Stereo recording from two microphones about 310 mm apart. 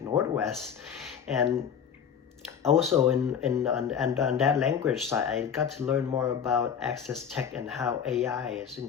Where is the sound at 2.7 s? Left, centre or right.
Centre.